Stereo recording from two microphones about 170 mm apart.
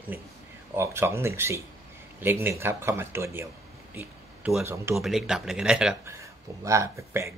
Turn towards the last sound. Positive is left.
turn(degrees=-15)  # may be behind; listen again after turning